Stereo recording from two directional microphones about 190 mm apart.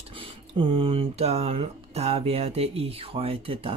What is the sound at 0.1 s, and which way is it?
Speech, 30° right (ahead or behind).